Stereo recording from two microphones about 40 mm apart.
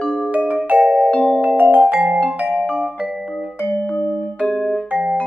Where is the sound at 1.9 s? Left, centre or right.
Centre.